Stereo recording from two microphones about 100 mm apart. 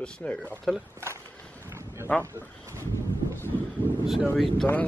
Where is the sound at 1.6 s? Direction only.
30° right (ahead or behind).